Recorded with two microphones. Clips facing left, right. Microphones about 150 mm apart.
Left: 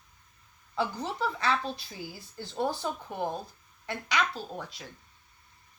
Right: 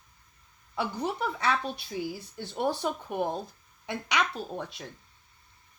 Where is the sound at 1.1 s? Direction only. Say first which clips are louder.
Left 2 dB; 15° right (ahead or behind).